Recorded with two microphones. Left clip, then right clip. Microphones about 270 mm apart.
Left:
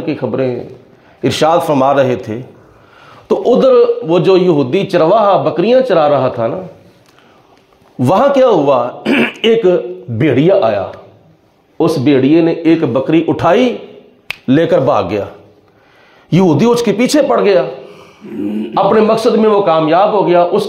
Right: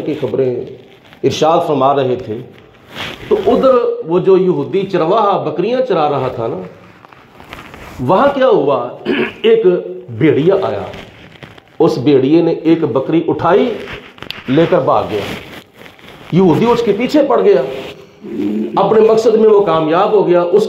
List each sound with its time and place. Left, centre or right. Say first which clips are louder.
0.2 s a man's voice: right 2 dB; left
8.0 s a man's voice: left 2 dB; left
11.8 s a man's voice: even; left
16.3 s a man's voice: even; left
18.7 s a man's voice: even; left